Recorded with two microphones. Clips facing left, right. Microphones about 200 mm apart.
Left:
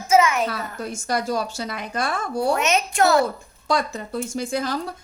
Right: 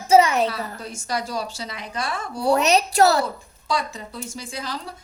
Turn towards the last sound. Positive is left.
turn(degrees=50)  # may be behind; listen again after turning